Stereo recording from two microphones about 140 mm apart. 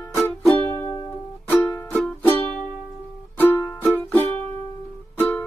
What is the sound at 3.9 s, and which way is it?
Music, 10° left (ahead or behind).